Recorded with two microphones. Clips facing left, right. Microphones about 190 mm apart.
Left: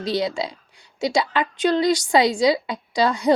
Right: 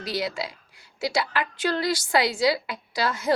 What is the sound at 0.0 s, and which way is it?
A woman's voice, 20° left (ahead or behind).